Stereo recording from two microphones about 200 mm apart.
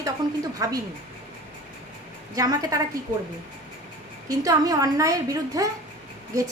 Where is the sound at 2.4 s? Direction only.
15° right (ahead or behind).